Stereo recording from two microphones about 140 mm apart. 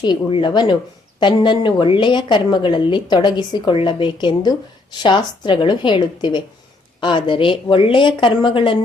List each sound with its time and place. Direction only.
0.0 s a woman's voice: 35° left (ahead or behind)